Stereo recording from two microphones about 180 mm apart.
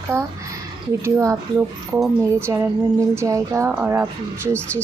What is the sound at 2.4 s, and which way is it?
Speech, 15° right (ahead or behind).